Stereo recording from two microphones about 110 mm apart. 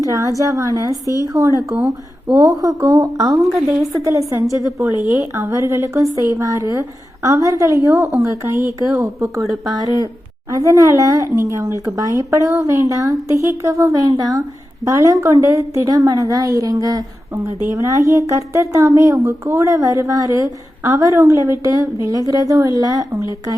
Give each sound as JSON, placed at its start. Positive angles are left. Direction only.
{"t": 0.0, "sound": "a woman's voice", "side_deg": -30}
{"t": 1.0, "sound": "speech", "side_deg": 30}
{"t": 1.3, "sound": "speech", "side_deg": -30}
{"t": 1.7, "sound": "speech", "side_deg": -10}
{"t": 2.3, "sound": "a woman's voice", "side_deg": -30}
{"t": 3.4, "sound": "a woman's voice", "side_deg": -5}
{"t": 4.0, "sound": "a woman's voice", "side_deg": -30}